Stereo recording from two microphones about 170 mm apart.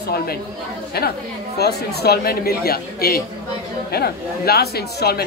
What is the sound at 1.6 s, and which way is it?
A woman's voice, 70° left (ahead or behind).